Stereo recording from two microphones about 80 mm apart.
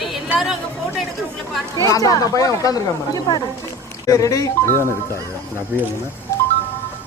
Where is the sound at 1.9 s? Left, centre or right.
Left.